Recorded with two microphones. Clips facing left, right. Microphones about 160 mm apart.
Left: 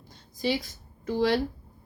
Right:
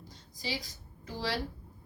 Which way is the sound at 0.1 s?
55° left (ahead or behind).